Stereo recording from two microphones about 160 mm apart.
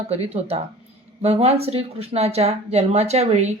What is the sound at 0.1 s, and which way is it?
Speech, 40° right (ahead or behind).